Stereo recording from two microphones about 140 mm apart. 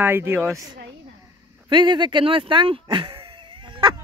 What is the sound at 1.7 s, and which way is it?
Speech, 35° right (ahead or behind).